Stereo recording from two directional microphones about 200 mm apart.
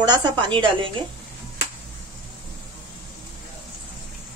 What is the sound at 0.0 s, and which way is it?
Speech, 20° right (ahead or behind).